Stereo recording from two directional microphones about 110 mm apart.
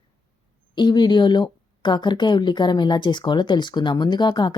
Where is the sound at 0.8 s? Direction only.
45° left (ahead or behind).